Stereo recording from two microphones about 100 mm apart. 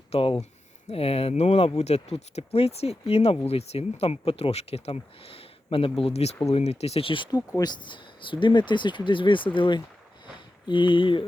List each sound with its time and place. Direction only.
0.1 s speech: 65° left (ahead or behind)
0.9 s speech: 80° left; by 7.3 s 60° left (ahead or behind)
7.3 s speech: 40° left (ahead or behind); by 11.3 s 55° left (ahead or behind)